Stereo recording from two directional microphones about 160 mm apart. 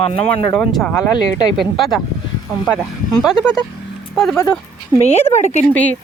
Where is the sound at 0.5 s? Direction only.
5° left (ahead or behind).